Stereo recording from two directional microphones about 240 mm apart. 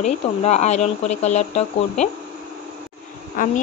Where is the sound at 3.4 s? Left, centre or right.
Left.